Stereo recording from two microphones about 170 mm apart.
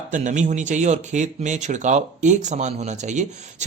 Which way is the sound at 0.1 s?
45° right (ahead or behind).